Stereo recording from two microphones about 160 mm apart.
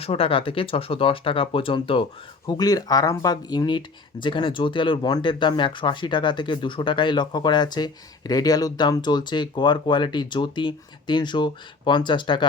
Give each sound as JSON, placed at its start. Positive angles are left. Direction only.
{"t": 0.0, "sound": "speech", "side_deg": 35}
{"t": 2.5, "sound": "speech", "side_deg": 25}